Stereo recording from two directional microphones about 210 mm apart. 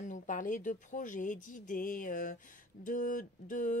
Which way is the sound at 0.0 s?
40° left (ahead or behind).